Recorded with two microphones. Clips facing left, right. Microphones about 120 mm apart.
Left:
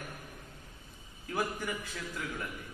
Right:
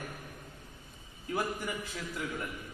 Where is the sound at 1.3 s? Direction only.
15° right (ahead or behind).